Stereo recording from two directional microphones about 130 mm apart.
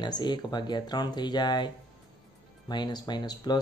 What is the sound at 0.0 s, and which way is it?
Speech, 35° left (ahead or behind).